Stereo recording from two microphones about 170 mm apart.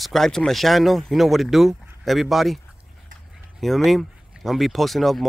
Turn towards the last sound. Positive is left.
turn(degrees=0)  # may be behind; listen again after turning